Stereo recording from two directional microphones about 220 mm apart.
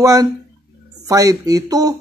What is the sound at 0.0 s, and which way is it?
Speech, 15° right (ahead or behind).